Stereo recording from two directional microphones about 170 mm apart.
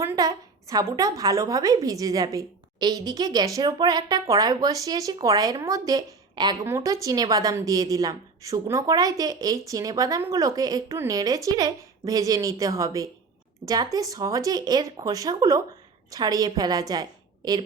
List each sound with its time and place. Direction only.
0.0 s a woman's voice: 15° right (ahead or behind)